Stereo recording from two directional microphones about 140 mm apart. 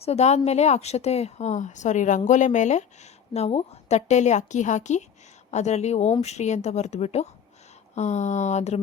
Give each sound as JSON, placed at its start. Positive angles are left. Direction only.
{"t": 0.0, "sound": "speech", "side_deg": 50}